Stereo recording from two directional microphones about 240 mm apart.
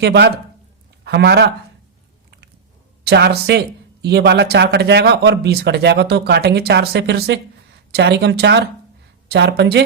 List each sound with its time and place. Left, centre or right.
0.0 s speech: right
3.0 s speech: right